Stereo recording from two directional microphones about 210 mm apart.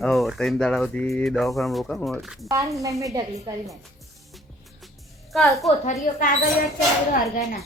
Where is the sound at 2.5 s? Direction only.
15° right (ahead or behind).